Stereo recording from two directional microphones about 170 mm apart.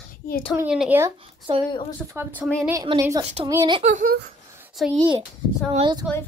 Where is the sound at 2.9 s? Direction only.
30° right (ahead or behind).